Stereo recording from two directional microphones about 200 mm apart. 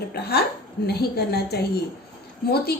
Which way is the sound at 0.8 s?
55° left (ahead or behind).